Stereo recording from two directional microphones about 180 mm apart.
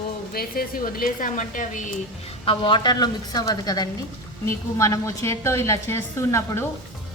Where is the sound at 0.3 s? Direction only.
55° left (ahead or behind).